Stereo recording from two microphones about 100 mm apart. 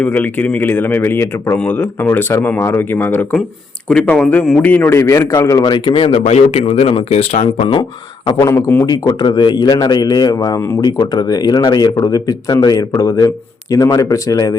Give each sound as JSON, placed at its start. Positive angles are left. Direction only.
{"t": 0.0, "sound": "speech", "side_deg": 15}
{"t": 3.8, "sound": "speech", "side_deg": 5}
{"t": 4.6, "sound": "speech", "side_deg": 20}
{"t": 5.7, "sound": "speech", "side_deg": 60}
{"t": 8.4, "sound": "speech", "side_deg": 30}
{"t": 8.9, "sound": "speech", "side_deg": 45}